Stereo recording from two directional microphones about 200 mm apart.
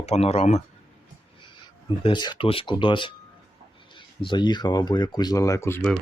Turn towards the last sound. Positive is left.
turn(degrees=10)  # may be behind; listen again after turning